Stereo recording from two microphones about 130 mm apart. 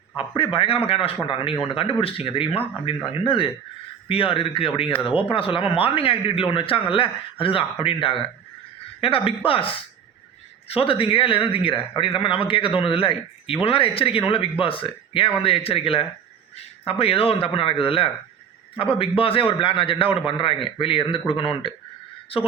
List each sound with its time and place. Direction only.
0.2 s speech: 40° left (ahead or behind)